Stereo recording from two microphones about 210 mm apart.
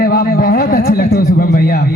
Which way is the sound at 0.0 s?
45° left (ahead or behind).